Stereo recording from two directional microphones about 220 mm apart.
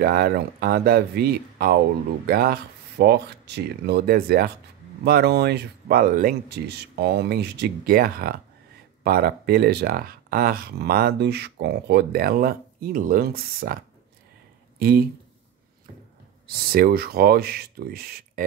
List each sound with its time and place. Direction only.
0.0 s speech: 45° right (ahead or behind)
14.8 s speech: 45° right (ahead or behind)
16.4 s speech: 45° right (ahead or behind)